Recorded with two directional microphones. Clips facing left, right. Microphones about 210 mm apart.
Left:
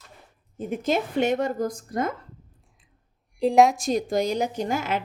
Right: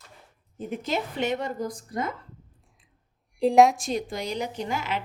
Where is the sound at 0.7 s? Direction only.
50° left (ahead or behind).